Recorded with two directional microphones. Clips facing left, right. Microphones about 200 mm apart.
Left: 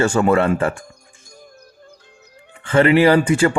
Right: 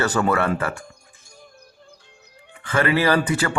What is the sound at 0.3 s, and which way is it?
Speech, 25° left (ahead or behind).